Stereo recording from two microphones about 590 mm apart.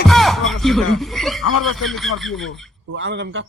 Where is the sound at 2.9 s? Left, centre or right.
Centre.